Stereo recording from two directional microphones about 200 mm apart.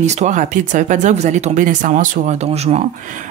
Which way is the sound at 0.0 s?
35° right (ahead or behind).